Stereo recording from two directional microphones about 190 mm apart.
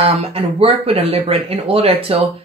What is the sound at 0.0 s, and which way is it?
Speech, 30° right (ahead or behind).